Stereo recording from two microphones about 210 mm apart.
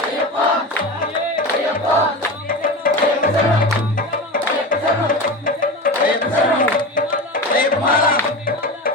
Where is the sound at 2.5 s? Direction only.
40° left (ahead or behind).